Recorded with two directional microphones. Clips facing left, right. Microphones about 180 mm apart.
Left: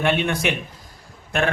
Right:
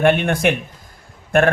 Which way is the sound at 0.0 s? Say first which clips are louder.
Right 5 dB; 55° right (ahead or behind).